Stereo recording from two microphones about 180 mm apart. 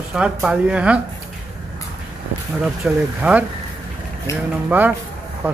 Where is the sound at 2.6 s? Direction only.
5° right (ahead or behind).